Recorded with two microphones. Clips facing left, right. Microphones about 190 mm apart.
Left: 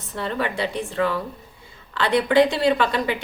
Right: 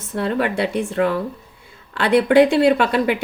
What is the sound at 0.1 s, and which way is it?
A woman's voice, 55° right (ahead or behind).